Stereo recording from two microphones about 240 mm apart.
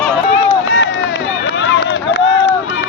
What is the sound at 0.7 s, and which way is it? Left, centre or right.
Run, left.